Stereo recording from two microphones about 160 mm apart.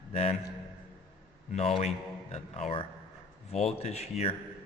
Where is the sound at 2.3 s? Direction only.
35° left (ahead or behind).